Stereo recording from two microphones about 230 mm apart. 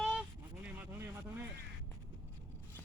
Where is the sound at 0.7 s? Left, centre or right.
Centre.